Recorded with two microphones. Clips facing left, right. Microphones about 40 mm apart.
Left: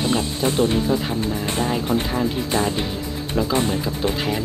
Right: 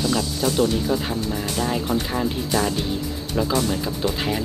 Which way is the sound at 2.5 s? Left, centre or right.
Left.